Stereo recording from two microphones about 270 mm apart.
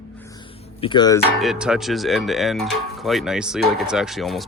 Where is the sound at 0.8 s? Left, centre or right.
Centre.